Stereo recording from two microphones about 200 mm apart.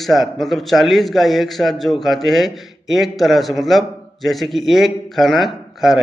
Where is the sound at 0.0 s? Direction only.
Centre (ahead or behind).